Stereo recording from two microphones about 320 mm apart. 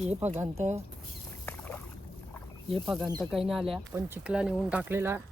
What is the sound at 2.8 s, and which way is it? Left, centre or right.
Speech, centre.